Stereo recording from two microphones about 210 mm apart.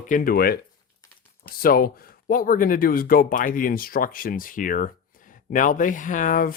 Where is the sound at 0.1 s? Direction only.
45° left (ahead or behind).